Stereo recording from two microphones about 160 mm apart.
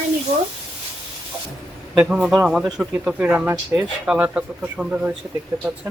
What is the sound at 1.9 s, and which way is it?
Speech, 5° right (ahead or behind).